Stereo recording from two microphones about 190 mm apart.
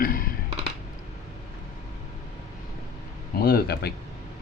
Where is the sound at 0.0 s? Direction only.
50° left (ahead or behind).